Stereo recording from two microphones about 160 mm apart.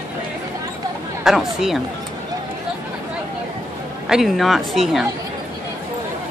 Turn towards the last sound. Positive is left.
turn(degrees=0)  # may be behind; listen again after turning